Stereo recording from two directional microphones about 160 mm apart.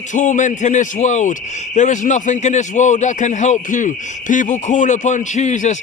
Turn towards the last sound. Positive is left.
turn(degrees=50)  # may be behind; listen again after turning